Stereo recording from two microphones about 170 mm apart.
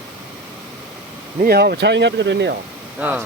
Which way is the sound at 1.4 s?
65° right (ahead or behind).